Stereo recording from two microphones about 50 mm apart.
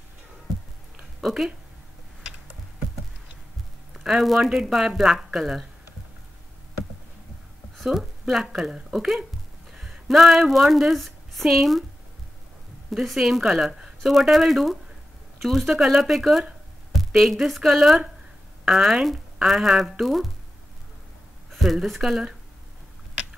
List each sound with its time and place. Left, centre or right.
3.9 s a sound: centre
4.2 s speech: centre
7.7 s speech: centre
12.9 s speech: centre
13.7 s a sound: centre
14.0 s a woman's voice: centre
21.5 s a woman's voice: centre